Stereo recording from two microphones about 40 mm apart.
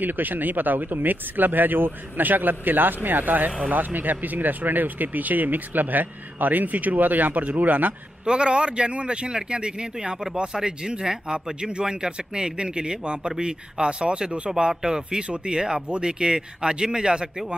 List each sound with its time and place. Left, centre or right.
0.0 s speech: right
8.3 s speech: right